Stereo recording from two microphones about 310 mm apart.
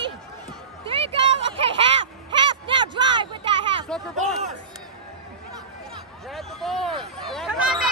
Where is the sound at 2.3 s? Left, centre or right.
Centre.